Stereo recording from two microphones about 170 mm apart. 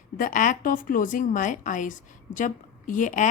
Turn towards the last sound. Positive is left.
turn(degrees=50)  # may be behind; listen again after turning